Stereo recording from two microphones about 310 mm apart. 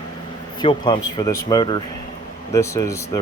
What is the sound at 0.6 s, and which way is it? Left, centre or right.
Speech, centre.